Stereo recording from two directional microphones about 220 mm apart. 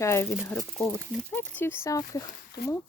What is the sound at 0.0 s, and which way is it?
Speech, 10° left (ahead or behind).